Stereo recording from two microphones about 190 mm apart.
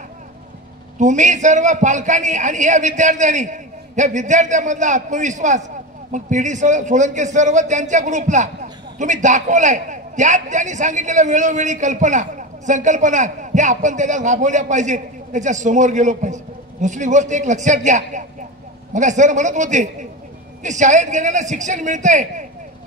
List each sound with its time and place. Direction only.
0.9 s a man's voice: 40° right (ahead or behind)